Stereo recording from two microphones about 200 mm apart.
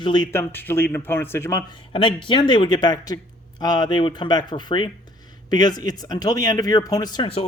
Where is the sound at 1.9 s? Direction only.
25° left (ahead or behind).